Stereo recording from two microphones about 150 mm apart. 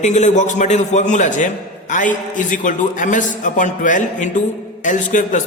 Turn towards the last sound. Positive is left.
turn(degrees=55)  # may be behind; listen again after turning